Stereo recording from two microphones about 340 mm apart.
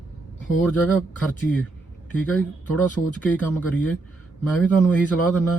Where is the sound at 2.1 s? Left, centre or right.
Centre.